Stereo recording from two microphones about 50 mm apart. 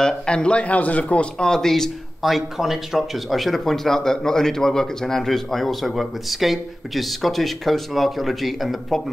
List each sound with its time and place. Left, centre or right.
0.0 s a man's voice: centre
2.2 s speech: centre